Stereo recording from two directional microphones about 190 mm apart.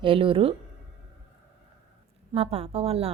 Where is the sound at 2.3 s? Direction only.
35° right (ahead or behind).